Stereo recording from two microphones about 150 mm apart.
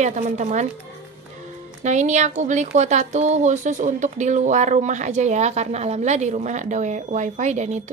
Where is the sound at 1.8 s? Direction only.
50° right (ahead or behind).